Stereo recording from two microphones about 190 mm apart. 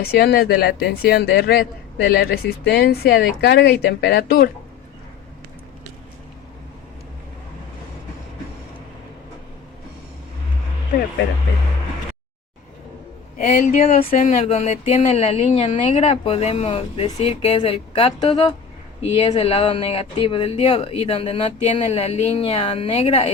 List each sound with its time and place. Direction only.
0.0 s speech: 55° left (ahead or behind)
13.4 s speech: 40° left (ahead or behind)
14.1 s speech: 45° left (ahead or behind)